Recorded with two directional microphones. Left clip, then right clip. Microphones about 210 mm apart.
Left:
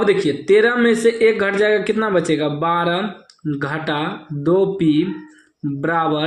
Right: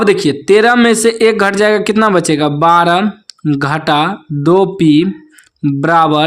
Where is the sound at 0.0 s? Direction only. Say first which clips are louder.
Right 5 dB; 40° right (ahead or behind).